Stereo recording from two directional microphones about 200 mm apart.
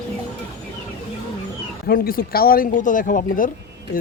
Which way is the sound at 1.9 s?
50° left (ahead or behind).